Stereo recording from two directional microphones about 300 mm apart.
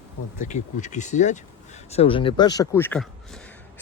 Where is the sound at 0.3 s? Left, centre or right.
Left.